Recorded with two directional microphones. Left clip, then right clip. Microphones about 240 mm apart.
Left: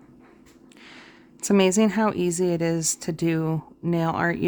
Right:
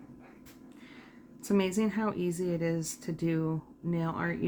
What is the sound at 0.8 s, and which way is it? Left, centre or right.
Speech, left.